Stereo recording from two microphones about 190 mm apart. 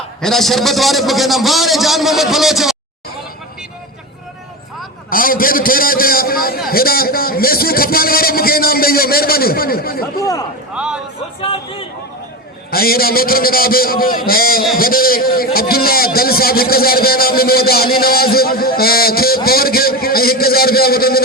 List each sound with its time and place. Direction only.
0.2 s a man's voice: centre (ahead or behind)
5.1 s a man's voice: 50° left (ahead or behind)
6.7 s a sound: 50° left (ahead or behind)
10.8 s a sound: 5° right (ahead or behind)
11.3 s speech: 30° left (ahead or behind)
12.7 s a man's voice: 50° left (ahead or behind)